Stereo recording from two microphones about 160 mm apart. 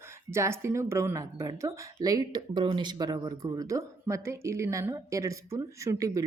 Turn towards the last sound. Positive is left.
turn(degrees=-20)  # may be behind; listen again after turning